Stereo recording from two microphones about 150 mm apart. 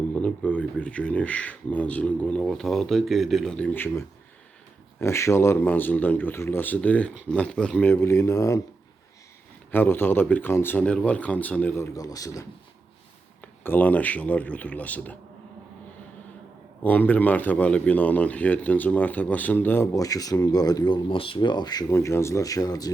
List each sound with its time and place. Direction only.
0.1 s a man's voice: 10° left (ahead or behind)
9.7 s a man's voice: 15° left (ahead or behind)
11.9 s a man's voice: 25° left (ahead or behind)
13.4 s a man's voice: 10° left (ahead or behind)
16.8 s a man's voice: 10° left (ahead or behind)